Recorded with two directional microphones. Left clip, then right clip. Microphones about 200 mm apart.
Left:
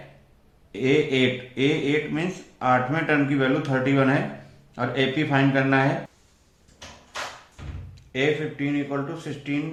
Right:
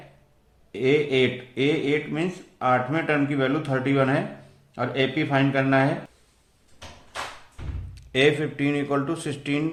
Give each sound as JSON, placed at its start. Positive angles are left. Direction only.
{"t": 0.7, "sound": "speech", "side_deg": -40}
{"t": 8.1, "sound": "speech", "side_deg": -55}